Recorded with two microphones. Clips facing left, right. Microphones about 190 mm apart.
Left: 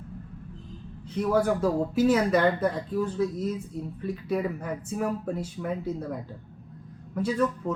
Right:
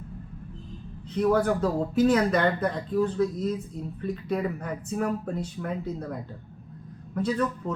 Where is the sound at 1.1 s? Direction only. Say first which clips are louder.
Right 1 dB; 10° left (ahead or behind).